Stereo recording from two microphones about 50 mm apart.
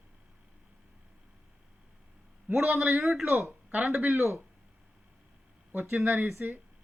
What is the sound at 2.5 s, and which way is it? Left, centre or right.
Speech, right.